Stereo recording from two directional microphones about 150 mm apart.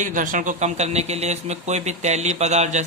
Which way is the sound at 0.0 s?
60° right (ahead or behind).